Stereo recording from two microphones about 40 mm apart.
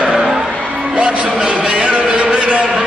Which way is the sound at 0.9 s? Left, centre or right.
Right.